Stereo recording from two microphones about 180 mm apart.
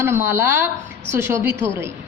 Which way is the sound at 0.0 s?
10° right (ahead or behind).